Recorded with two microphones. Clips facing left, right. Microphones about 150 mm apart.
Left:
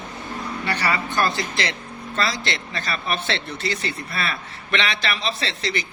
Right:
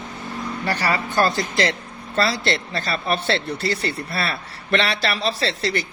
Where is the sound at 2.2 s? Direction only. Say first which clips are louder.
Right 5 dB; 35° right (ahead or behind).